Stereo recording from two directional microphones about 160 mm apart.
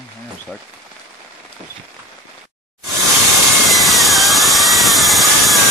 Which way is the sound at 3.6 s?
Centre (ahead or behind).